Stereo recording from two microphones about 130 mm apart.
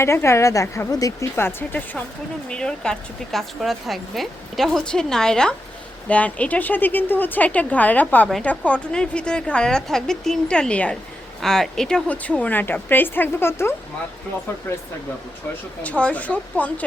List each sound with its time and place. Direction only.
0.0 s a woman's voice: 20° left (ahead or behind)
15.8 s a woman's voice: 10° left (ahead or behind)